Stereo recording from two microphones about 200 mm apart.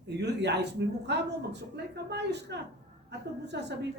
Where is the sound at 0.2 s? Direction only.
55° right (ahead or behind).